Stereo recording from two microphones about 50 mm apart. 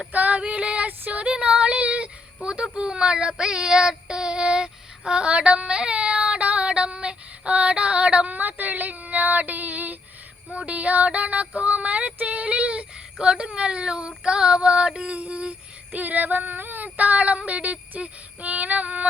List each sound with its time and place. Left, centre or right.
0.1 s female singing: right
0.9 s a sound: right
1.3 s child singing: right
8.4 s female singing: right
10.5 s female singing: right